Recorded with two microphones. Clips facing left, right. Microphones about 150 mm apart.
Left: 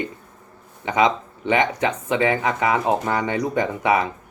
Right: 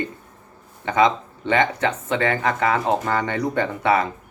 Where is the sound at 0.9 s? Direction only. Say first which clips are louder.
Right 1 dB; 15° left (ahead or behind).